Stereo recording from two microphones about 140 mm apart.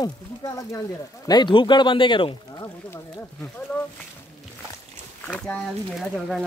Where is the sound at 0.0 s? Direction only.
25° left (ahead or behind).